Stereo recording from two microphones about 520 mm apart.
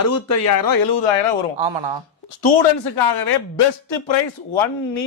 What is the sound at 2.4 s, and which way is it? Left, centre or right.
Speech, left.